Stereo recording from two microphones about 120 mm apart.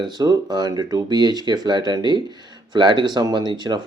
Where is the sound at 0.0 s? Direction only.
35° right (ahead or behind).